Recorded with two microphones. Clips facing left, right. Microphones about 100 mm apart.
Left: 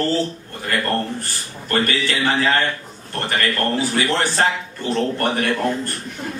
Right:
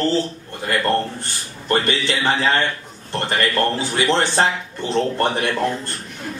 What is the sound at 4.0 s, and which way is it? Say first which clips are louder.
A man's voice: right 4 dB; 20° right (ahead or behind).